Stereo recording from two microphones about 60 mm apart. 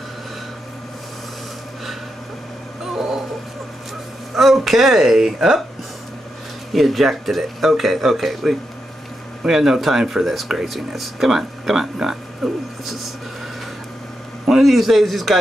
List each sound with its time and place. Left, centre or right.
2.8 s a sound: centre
4.4 s speech: centre
6.7 s speech: centre
14.4 s speech: centre